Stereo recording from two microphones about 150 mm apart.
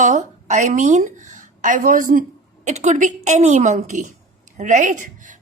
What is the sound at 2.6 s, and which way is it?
A woman's voice, 50° right (ahead or behind).